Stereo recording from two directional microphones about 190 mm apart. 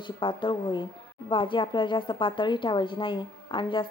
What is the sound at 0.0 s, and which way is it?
Speech, 25° left (ahead or behind).